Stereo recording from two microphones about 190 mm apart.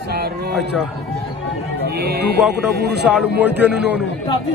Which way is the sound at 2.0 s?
60° right (ahead or behind).